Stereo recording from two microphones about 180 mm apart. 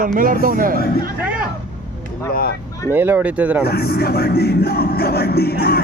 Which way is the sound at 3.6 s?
60° left (ahead or behind).